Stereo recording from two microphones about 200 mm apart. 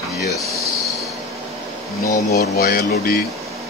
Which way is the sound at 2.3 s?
50° left (ahead or behind).